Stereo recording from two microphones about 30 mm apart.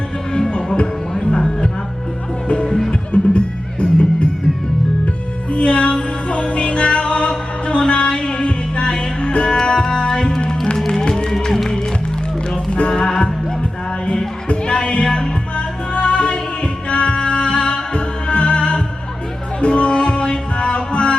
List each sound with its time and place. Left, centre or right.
2.6 s music: centre
3.1 s music: left
5.5 s music: left
11.3 s music: centre
12.9 s music: left
14.4 s music: left
19.9 s music: left
20.1 s music: left